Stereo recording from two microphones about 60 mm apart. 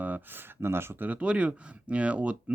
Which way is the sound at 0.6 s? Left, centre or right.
Right.